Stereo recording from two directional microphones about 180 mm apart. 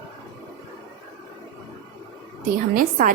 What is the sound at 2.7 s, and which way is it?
Speech, 50° right (ahead or behind).